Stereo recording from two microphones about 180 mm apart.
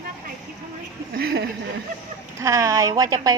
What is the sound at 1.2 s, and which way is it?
Speech, 60° right (ahead or behind).